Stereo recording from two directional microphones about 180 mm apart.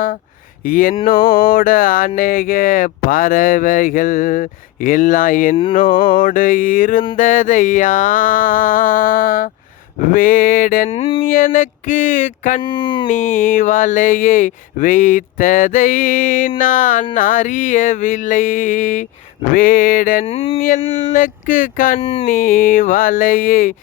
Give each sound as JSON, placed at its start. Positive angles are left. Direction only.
{"t": 0.6, "sound": "speech", "side_deg": 50}
{"t": 10.8, "sound": "a sound", "side_deg": 30}
{"t": 11.2, "sound": "speech", "side_deg": 50}
{"t": 12.6, "sound": "speech", "side_deg": 25}
{"t": 13.1, "sound": "speech", "side_deg": 45}
{"t": 20.2, "sound": "a sound", "side_deg": 30}
{"t": 20.6, "sound": "speech", "side_deg": 50}
{"t": 22.0, "sound": "a sound", "side_deg": 30}
{"t": 22.3, "sound": "speech", "side_deg": 50}